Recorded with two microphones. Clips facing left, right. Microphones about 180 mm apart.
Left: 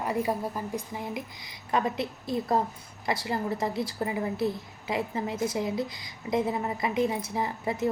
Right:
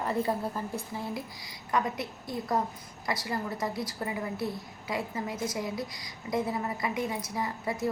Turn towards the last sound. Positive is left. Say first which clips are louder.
# left 3 dB
turn(degrees=25)  # may be behind; listen again after turning